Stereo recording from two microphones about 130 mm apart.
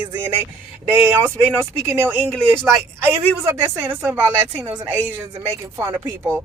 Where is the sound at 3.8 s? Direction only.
15° right (ahead or behind).